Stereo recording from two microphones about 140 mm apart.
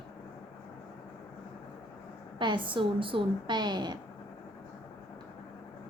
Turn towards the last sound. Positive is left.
turn(degrees=-30)  # may be behind; listen again after turning